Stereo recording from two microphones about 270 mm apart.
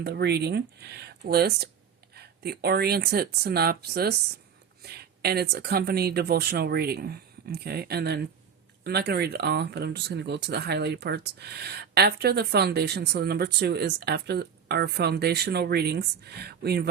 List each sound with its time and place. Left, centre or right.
0.0 s speech: right